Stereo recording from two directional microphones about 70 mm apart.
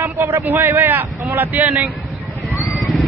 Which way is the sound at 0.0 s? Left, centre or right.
Right.